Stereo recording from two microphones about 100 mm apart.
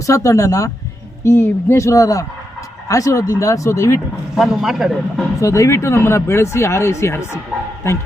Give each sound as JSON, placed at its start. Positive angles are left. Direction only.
{"t": 0.0, "sound": "speech", "side_deg": 30}
{"t": 4.4, "sound": "speech", "side_deg": -5}
{"t": 5.4, "sound": "speech", "side_deg": 30}